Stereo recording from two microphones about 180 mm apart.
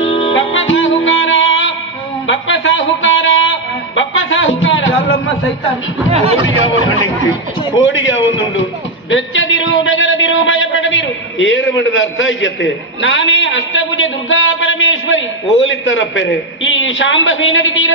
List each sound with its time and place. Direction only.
0.3 s music: 90° left
2.2 s a sound: 90° left
6.0 s speech: 35° right (ahead or behind)
6.4 s a man's voice: 90° left